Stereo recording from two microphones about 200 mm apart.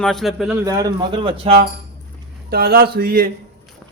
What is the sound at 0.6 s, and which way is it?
Speech, 15° right (ahead or behind).